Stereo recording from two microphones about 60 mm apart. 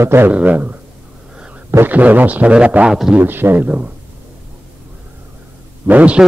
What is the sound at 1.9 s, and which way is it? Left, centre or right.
A man's voice, right.